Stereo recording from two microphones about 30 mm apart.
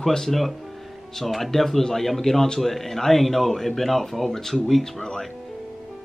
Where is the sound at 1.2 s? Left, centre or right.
Centre.